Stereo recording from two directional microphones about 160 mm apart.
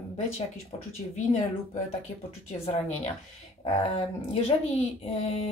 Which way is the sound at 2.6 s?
40° left (ahead or behind).